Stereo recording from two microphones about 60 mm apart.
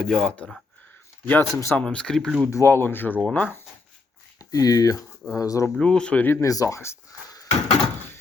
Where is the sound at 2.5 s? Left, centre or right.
Left.